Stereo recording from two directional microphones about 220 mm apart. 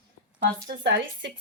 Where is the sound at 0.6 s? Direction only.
55° right (ahead or behind).